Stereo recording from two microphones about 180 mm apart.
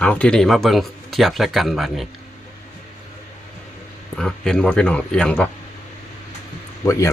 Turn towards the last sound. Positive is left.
turn(degrees=15)  # may be behind; listen again after turning